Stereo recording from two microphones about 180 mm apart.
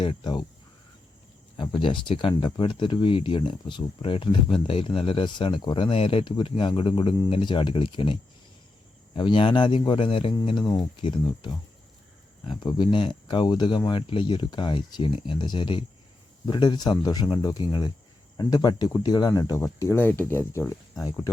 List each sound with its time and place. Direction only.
0.0 s speech: 25° left (ahead or behind)
1.5 s speech: 25° left (ahead or behind)